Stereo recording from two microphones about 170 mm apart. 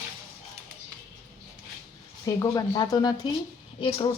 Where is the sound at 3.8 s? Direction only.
35° left (ahead or behind).